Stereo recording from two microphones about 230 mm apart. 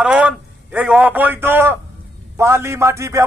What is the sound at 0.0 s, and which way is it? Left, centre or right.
A man's voice, centre.